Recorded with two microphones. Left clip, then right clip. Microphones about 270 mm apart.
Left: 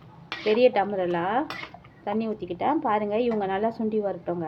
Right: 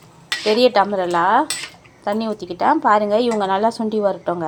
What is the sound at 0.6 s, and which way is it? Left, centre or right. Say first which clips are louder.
A woman's voice: right 6 dB; right.